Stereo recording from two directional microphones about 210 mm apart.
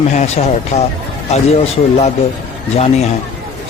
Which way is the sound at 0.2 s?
30° left (ahead or behind).